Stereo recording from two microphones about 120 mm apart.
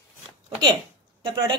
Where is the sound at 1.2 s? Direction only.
40° right (ahead or behind).